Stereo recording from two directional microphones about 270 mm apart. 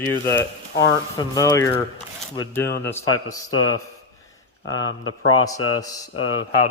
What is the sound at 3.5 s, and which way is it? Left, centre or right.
Speech, left.